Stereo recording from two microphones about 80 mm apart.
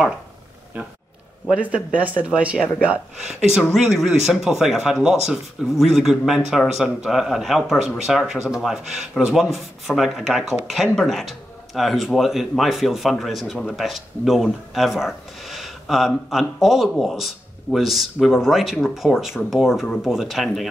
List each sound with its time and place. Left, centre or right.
1.5 s speech: centre